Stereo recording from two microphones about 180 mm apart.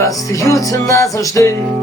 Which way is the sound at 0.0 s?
20° left (ahead or behind).